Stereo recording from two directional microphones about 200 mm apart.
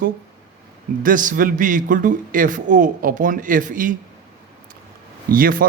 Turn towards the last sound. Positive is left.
turn(degrees=-45)  # may be behind; listen again after turning